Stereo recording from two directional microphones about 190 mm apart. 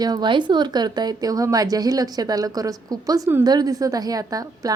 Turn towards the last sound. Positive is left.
turn(degrees=-20)  # may be behind; listen again after turning